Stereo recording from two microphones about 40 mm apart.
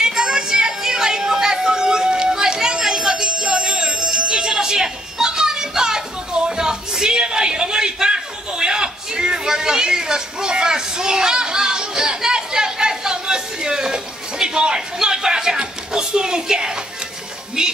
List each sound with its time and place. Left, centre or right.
0.0 s music: centre